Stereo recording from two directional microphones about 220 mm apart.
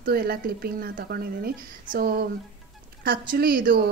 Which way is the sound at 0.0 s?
45° right (ahead or behind).